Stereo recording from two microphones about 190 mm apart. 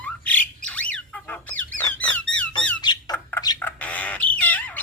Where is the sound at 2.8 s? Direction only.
20° left (ahead or behind).